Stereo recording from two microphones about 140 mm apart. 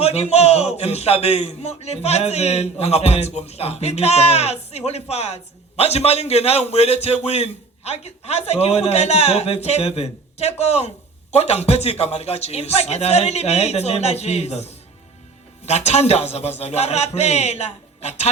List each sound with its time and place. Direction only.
0.0 s a man's voice: 50° left (ahead or behind)